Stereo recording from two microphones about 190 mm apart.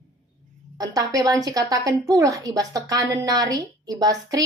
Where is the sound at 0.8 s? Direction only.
20° right (ahead or behind).